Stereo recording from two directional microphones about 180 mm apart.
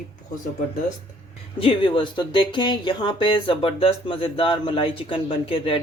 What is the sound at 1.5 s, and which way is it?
Speech, 30° left (ahead or behind).